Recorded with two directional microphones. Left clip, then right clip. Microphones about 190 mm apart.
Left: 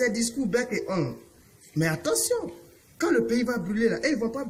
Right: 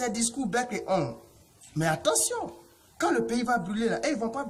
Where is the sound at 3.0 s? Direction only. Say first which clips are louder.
Left 3 dB; 30° right (ahead or behind).